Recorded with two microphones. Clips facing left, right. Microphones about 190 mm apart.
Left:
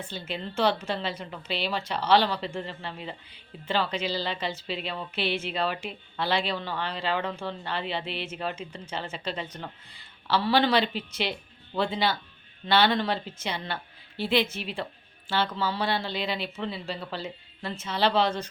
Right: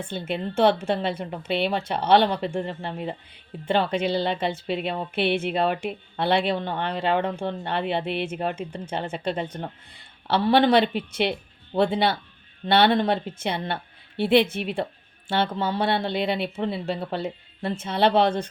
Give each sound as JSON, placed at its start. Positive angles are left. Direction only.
{"t": 0.1, "sound": "a woman's voice", "side_deg": -55}